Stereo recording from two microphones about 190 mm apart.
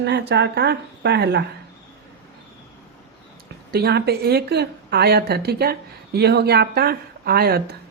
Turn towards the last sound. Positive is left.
turn(degrees=-55)  # may be behind; listen again after turning